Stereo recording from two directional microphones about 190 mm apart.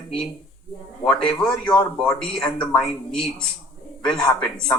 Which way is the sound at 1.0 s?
5° left (ahead or behind).